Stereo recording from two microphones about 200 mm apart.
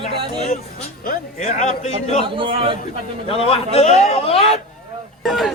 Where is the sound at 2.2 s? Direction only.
25° right (ahead or behind).